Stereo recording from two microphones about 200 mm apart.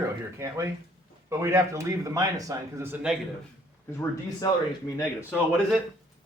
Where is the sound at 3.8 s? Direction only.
15° left (ahead or behind).